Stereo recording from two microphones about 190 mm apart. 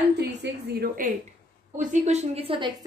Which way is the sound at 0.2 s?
60° right (ahead or behind).